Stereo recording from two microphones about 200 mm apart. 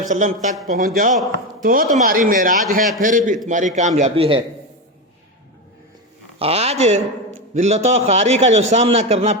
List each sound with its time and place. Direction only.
0.0 s a man's voice: 40° right (ahead or behind)
6.4 s a man's voice: 30° right (ahead or behind)